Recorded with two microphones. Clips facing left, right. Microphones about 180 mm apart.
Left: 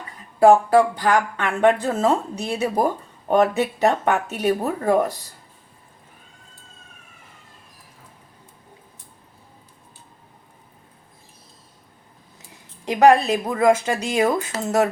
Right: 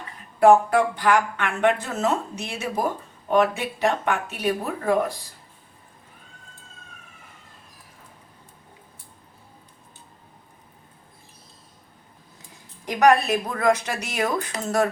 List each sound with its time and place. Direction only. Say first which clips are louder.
0.3 s speech: left 2 dB; 30° left (ahead or behind)
12.8 s speech: left 3 dB; 25° left (ahead or behind)